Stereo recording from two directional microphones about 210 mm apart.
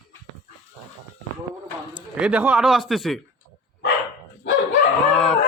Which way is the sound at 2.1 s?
5° right (ahead or behind).